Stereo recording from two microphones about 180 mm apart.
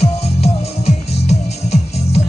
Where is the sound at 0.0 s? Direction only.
35° left (ahead or behind).